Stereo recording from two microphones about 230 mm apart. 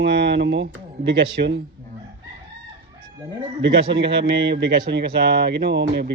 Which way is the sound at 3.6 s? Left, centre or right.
Right.